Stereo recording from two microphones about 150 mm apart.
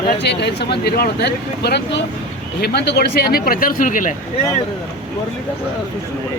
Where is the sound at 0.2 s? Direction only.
90° left; by 4.1 s 65° left (ahead or behind).